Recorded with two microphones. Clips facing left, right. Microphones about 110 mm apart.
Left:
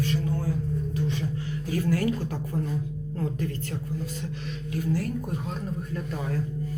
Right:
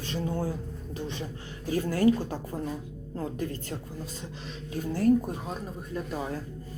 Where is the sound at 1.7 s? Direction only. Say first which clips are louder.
Right 2 dB; 25° right (ahead or behind).